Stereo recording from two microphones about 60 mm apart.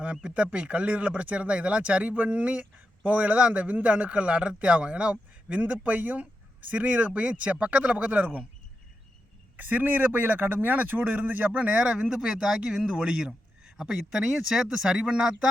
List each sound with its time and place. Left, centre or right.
0.2 s speech: centre
9.6 s speech: right; by 15.4 s centre